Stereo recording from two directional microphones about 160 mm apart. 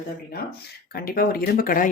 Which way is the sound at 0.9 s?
65° left (ahead or behind).